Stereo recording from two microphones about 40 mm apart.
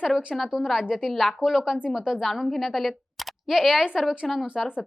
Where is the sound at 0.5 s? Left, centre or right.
Centre.